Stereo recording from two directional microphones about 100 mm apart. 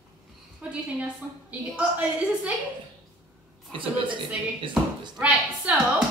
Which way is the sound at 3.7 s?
55° right (ahead or behind).